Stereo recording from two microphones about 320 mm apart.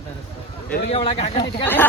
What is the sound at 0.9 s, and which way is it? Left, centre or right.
Speech, centre.